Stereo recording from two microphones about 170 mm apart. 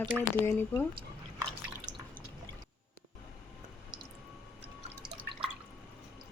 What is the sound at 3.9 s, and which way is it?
Squish, 5° right (ahead or behind).